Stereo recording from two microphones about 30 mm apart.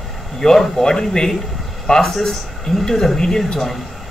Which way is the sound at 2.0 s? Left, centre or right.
Centre.